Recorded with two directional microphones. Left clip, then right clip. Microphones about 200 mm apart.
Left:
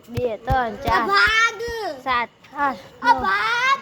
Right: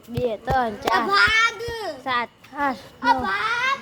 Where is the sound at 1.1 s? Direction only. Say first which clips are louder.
Left 1 dB; 25° left (ahead or behind).